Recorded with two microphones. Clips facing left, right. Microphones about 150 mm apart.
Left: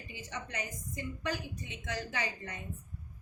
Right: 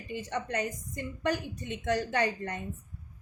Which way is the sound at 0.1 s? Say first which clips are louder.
Right 10 dB; 60° right (ahead or behind).